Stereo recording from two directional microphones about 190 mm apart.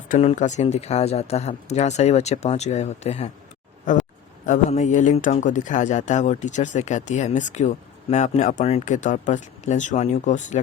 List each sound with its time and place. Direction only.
0.1 s a man's voice: 35° left (ahead or behind)